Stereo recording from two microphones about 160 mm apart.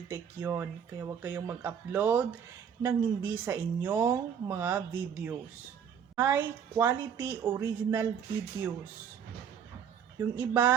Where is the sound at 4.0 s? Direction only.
25° right (ahead or behind).